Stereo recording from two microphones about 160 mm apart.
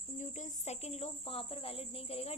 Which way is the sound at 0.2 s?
50° left (ahead or behind).